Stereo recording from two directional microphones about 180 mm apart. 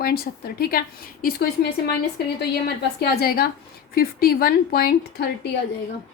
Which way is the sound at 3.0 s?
55° left (ahead or behind).